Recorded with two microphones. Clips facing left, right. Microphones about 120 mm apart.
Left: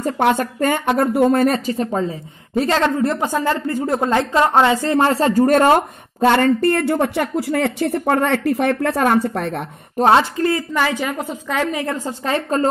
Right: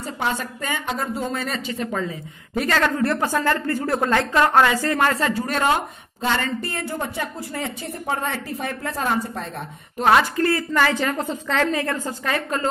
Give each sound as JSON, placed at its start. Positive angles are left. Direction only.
{"t": 0.0, "sound": "speech", "side_deg": 55}
{"t": 1.8, "sound": "a woman's voice", "side_deg": 30}
{"t": 5.3, "sound": "speech", "side_deg": 45}
{"t": 9.9, "sound": "a woman's voice", "side_deg": 30}